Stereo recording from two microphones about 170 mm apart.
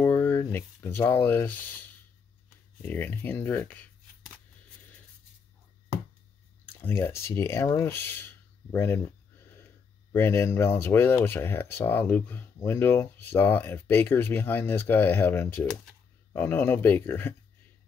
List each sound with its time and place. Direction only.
0.0 s speech: 10° left (ahead or behind)
2.8 s speech: 10° left (ahead or behind)
7.0 s speech: 15° left (ahead or behind)
10.1 s speech: 15° left (ahead or behind)